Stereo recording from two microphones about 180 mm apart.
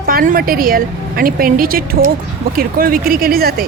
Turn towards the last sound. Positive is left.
turn(degrees=-55)  # may be behind; listen again after turning